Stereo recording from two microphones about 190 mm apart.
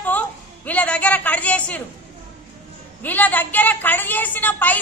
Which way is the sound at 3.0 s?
10° left (ahead or behind).